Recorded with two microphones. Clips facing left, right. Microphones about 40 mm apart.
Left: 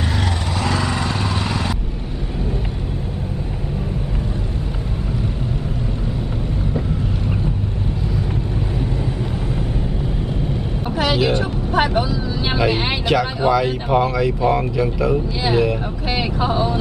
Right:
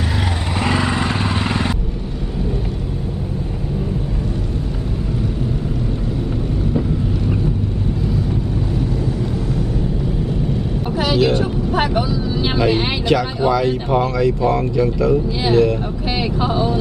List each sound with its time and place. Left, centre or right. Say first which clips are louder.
0.6 s vehicle: right 3 dB; right
11.0 s speech: right 2 dB; centre